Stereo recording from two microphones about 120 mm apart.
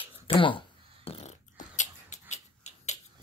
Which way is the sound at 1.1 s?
65° left (ahead or behind).